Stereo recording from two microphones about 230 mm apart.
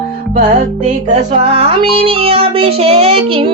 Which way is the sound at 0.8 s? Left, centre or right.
Right.